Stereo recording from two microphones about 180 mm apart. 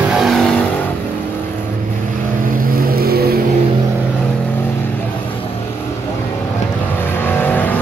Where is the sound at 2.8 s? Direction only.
55° right (ahead or behind).